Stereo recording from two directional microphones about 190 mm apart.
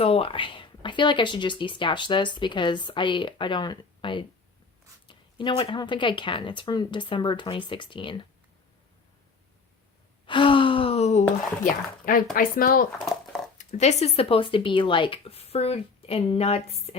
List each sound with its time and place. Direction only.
0.0 s speech: 30° left (ahead or behind)
10.2 s speech: 25° left (ahead or behind); by 12.8 s 50° left (ahead or behind)
13.1 s a sound: centre (ahead or behind)
13.7 s speech: 35° left (ahead or behind)